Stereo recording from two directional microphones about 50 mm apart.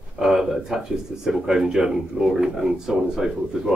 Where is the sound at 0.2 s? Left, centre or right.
Centre.